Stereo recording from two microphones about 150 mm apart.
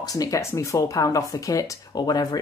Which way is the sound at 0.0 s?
25° left (ahead or behind).